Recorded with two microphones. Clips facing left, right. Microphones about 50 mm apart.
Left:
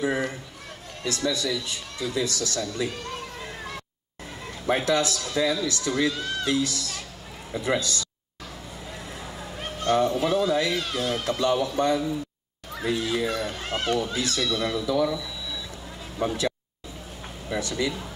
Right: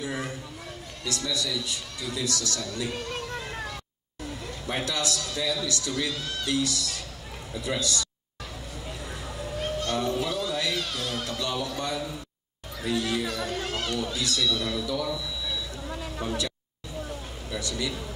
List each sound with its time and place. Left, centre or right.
0.0 s speech: left
4.7 s speech: left
9.8 s speech: left
16.2 s speech: left
17.5 s speech: left